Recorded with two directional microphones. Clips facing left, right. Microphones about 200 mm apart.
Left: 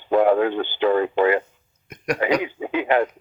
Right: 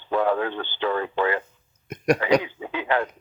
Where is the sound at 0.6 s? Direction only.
15° left (ahead or behind).